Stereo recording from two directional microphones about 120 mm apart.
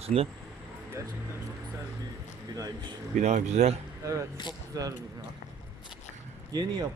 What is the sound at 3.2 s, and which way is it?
Speech, 75° right (ahead or behind).